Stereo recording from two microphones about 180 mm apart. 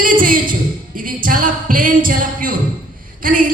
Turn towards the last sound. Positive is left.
turn(degrees=-50)  # may be behind; listen again after turning